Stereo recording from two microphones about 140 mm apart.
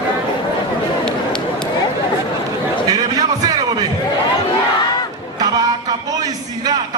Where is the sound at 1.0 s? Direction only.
5° left (ahead or behind).